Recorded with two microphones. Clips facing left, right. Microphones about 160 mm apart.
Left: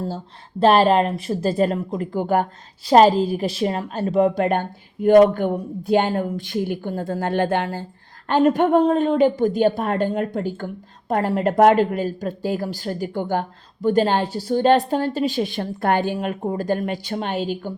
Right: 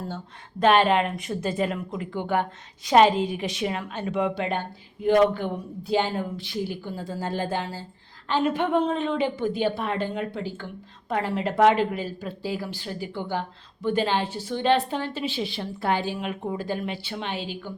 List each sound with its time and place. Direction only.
0.6 s a woman's voice: 35° left (ahead or behind)
4.4 s a woman's voice: 50° left (ahead or behind)
8.3 s a woman's voice: 45° left (ahead or behind)